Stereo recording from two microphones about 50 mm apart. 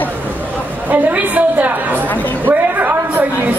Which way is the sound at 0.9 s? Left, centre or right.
Right.